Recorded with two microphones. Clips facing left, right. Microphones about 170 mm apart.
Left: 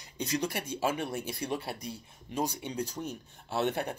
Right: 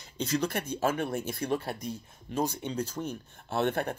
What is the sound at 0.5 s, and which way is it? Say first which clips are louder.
Speech: right 2 dB; 50° right (ahead or behind).